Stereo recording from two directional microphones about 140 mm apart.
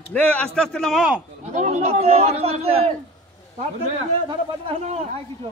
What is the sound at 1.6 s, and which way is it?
A man's voice, 55° right (ahead or behind).